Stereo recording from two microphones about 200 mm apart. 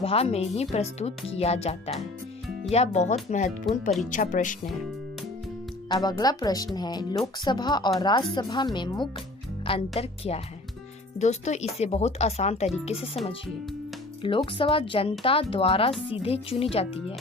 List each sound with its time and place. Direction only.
0.0 s speech: 30° left (ahead or behind)
5.9 s speech: 20° left (ahead or behind)
14.2 s speech: 25° left (ahead or behind)